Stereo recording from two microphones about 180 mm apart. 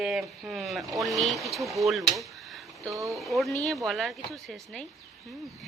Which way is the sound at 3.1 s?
Centre (ahead or behind).